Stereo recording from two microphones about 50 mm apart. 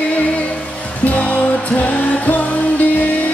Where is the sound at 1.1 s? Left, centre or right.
Left.